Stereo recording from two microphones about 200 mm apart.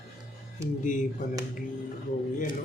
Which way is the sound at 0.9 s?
40° left (ahead or behind).